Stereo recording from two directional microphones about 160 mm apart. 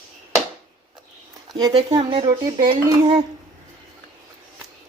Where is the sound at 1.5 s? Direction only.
25° right (ahead or behind).